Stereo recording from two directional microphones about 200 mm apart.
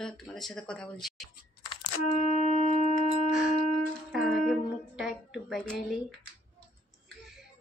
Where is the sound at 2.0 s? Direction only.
35° left (ahead or behind).